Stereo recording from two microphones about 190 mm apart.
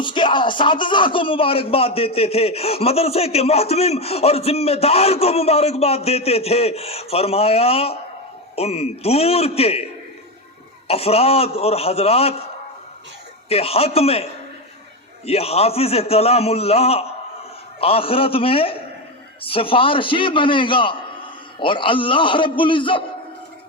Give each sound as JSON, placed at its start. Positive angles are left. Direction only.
{"t": 0.0, "sound": "speech", "side_deg": 25}
{"t": 10.8, "sound": "speech", "side_deg": 30}
{"t": 13.5, "sound": "speech", "side_deg": 30}
{"t": 15.3, "sound": "a man's voice", "side_deg": 30}